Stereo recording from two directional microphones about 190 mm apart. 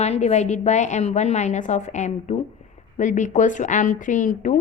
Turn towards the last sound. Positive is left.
turn(degrees=40)  # may be behind; listen again after turning